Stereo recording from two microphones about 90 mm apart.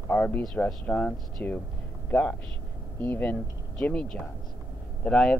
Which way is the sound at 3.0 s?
20° left (ahead or behind).